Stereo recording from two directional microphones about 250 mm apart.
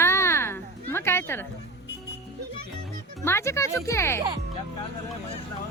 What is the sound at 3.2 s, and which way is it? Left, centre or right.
Speech, centre.